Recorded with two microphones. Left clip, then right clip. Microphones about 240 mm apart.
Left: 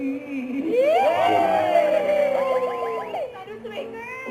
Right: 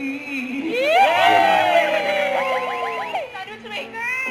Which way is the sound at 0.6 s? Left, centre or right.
Centre.